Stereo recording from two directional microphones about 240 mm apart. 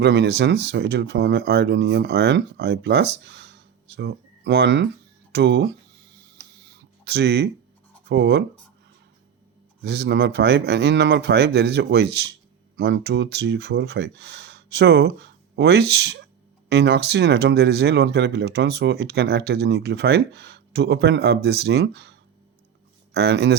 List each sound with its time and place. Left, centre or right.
0.0 s speech: right
7.0 s speech: right
9.8 s speech: right
23.1 s speech: right